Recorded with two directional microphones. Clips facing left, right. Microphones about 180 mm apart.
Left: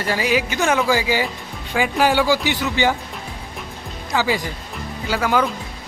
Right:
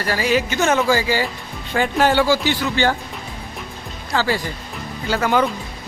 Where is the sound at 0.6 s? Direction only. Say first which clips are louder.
Right 1 dB; centre (ahead or behind).